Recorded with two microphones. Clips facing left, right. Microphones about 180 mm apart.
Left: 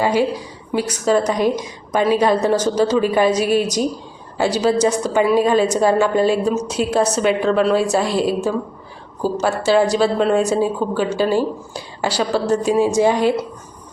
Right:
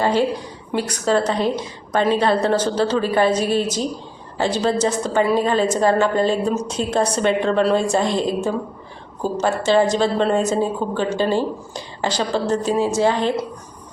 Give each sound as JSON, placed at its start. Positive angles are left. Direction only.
{"t": 0.0, "sound": "a woman's voice", "side_deg": 10}